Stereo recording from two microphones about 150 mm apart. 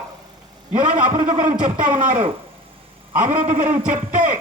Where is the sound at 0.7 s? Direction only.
35° right (ahead or behind).